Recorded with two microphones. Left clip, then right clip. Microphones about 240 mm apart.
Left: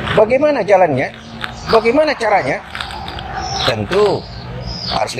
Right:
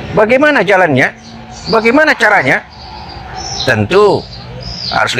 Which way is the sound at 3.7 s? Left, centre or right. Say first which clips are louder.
Right 6 dB; right.